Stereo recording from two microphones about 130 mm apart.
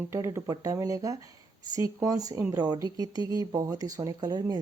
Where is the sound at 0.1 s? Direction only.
20° right (ahead or behind).